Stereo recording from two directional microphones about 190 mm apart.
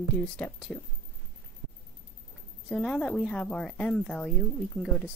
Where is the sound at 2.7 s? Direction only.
5° left (ahead or behind).